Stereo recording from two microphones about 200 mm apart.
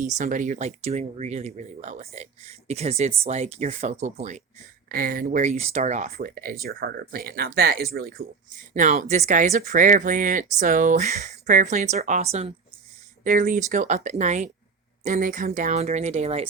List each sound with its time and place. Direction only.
0.0 s speech: 40° right (ahead or behind)
4.9 s speech: 45° right (ahead or behind)
8.7 s speech: 35° right (ahead or behind)